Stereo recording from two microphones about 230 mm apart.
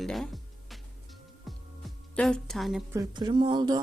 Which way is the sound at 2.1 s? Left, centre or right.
Centre.